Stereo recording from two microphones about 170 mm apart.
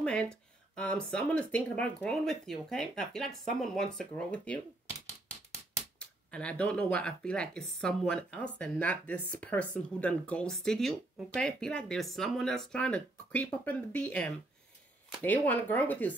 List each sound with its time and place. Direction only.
0.0 s speech: 5° left (ahead or behind)
5.9 s speech: 5° left (ahead or behind)